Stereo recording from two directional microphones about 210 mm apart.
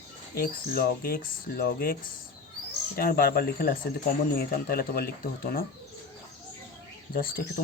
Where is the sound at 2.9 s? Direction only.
45° left (ahead or behind).